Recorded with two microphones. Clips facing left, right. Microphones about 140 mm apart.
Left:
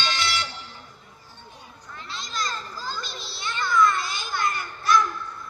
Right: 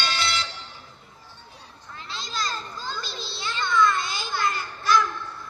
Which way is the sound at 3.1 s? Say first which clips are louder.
Right 1 dB; 30° right (ahead or behind).